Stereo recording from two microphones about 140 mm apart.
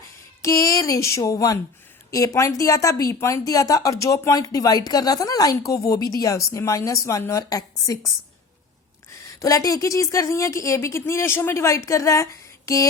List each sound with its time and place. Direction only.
0.4 s speech: 25° left (ahead or behind)